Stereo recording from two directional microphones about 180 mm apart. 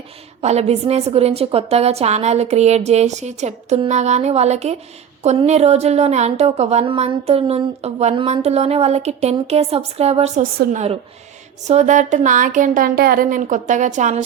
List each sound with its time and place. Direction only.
0.4 s speech: 35° right (ahead or behind)